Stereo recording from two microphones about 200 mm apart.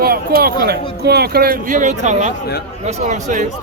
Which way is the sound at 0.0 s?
50° right (ahead or behind).